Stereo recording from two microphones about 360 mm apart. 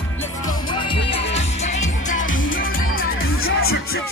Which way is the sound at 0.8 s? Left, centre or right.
Centre.